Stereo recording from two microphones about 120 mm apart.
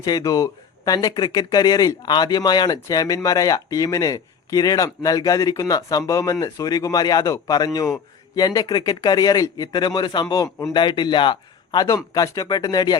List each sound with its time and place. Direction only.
0.0 s a man's voice: 30° left (ahead or behind)
10.8 s a man's voice: 40° left (ahead or behind)